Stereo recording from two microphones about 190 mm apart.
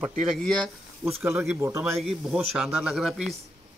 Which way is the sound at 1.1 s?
10° right (ahead or behind).